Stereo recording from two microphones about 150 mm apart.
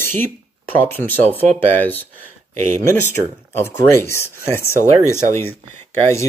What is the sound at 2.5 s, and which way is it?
Speech, 55° right (ahead or behind).